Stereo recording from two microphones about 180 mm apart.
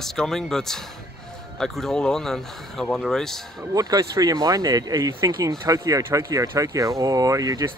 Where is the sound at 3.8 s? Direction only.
20° right (ahead or behind).